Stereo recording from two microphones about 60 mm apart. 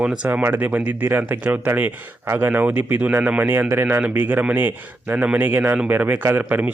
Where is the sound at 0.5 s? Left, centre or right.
Right.